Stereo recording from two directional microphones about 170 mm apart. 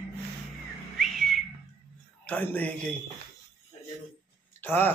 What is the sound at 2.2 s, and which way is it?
Speech, 10° left (ahead or behind).